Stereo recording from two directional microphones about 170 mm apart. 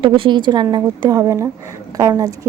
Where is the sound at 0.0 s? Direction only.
30° right (ahead or behind).